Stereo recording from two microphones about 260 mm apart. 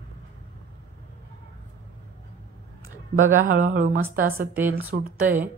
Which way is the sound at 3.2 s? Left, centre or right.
Right.